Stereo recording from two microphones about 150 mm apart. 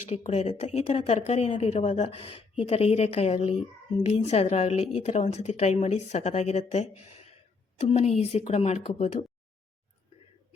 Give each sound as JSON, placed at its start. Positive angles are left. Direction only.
{"t": 0.2, "sound": "speech", "side_deg": 45}